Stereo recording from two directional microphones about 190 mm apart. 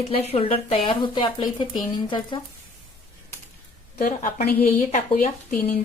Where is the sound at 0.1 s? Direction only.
30° left (ahead or behind).